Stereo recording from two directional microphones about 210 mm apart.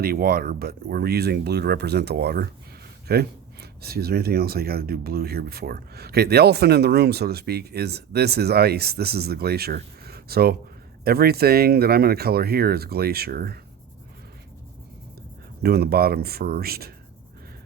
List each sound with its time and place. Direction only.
0.0 s speech: 45° right (ahead or behind)
15.6 s speech: 50° right (ahead or behind)